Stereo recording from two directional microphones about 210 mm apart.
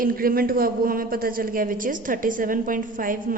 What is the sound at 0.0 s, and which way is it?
A woman's voice, 45° right (ahead or behind).